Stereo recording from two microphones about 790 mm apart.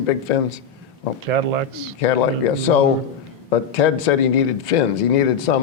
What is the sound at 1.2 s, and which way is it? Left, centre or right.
Speech, right.